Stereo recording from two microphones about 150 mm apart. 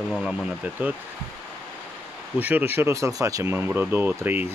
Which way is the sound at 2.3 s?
10° right (ahead or behind).